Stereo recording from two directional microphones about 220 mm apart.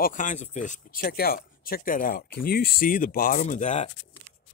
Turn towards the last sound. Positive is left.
turn(degrees=35)  # may be behind; listen again after turning